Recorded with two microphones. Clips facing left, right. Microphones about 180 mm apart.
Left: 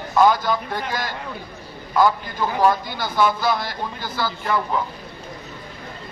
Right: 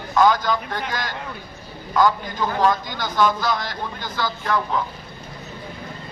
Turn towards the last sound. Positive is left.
turn(degrees=10)  # may be behind; listen again after turning